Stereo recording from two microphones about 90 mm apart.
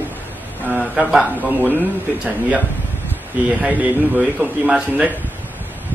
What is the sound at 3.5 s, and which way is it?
A man's voice, 15° right (ahead or behind).